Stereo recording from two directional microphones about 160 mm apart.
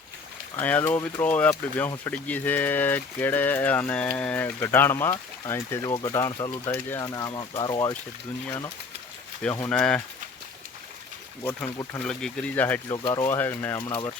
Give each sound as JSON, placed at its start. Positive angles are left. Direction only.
{"t": 0.5, "sound": "speech", "side_deg": 10}
{"t": 5.8, "sound": "speech", "side_deg": 25}
{"t": 9.6, "sound": "speech", "side_deg": 5}
{"t": 11.9, "sound": "speech", "side_deg": 5}
{"t": 13.0, "sound": "speech", "side_deg": 25}
{"t": 13.2, "sound": "speech", "side_deg": 15}
{"t": 13.7, "sound": "speech", "side_deg": 25}